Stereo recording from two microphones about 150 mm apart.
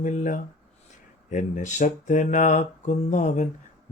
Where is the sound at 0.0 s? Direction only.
55° left (ahead or behind).